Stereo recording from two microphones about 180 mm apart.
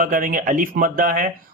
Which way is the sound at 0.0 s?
50° right (ahead or behind).